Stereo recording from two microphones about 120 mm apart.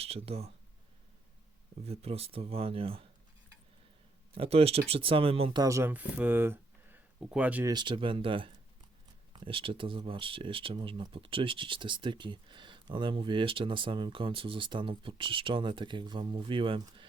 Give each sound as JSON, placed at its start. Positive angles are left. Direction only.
{"t": 0.0, "sound": "speech", "side_deg": -55}
{"t": 1.9, "sound": "speech", "side_deg": -55}
{"t": 4.4, "sound": "speech", "side_deg": -55}
{"t": 5.5, "sound": "speech", "side_deg": -25}
{"t": 5.9, "sound": "speech", "side_deg": -15}
{"t": 7.7, "sound": "speech", "side_deg": -40}